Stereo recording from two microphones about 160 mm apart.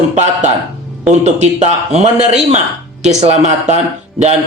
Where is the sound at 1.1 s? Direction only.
45° right (ahead or behind).